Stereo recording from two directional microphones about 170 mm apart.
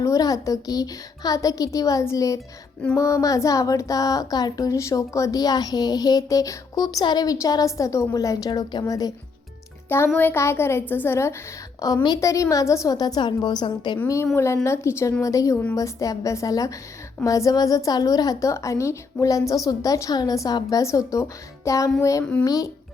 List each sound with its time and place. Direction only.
0.0 s speech: 20° left (ahead or behind)
10.2 s a woman's voice: 15° left (ahead or behind)
14.0 s a woman's voice: 15° left (ahead or behind)